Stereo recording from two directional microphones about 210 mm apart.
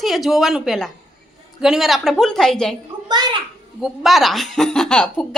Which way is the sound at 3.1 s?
20° right (ahead or behind).